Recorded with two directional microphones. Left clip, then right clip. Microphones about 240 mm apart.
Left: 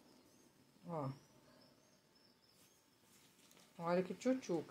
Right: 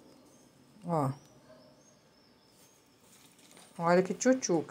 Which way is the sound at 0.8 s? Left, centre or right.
Right.